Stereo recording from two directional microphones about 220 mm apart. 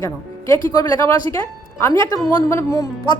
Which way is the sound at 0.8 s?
10° left (ahead or behind).